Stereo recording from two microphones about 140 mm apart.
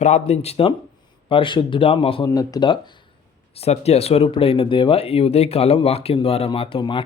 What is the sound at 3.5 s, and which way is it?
Speech, 45° left (ahead or behind).